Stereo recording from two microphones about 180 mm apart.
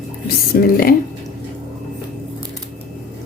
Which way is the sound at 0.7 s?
55° left (ahead or behind).